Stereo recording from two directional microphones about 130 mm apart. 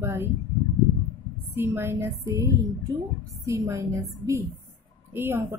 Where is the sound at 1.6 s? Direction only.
20° right (ahead or behind).